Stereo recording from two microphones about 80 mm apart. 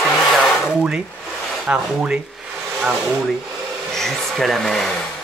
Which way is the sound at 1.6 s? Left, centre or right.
Centre.